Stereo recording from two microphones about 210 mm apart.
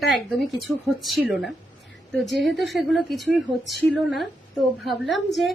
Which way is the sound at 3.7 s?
55° left (ahead or behind).